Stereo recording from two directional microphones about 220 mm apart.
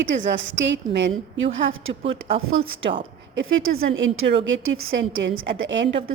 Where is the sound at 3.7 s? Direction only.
55° right (ahead or behind).